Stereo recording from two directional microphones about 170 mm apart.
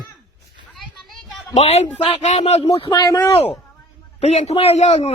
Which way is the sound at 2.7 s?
25° left (ahead or behind).